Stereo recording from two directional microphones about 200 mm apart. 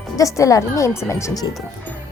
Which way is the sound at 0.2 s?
15° left (ahead or behind).